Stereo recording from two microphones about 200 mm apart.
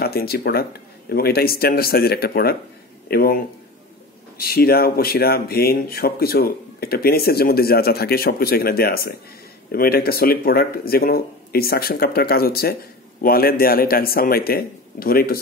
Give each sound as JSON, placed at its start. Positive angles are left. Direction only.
{"t": 0.0, "sound": "speech", "side_deg": 50}